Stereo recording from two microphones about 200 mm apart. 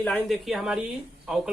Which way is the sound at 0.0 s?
Centre (ahead or behind).